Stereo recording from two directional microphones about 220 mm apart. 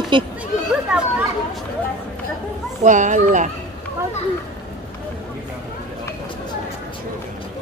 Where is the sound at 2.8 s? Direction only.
35° right (ahead or behind).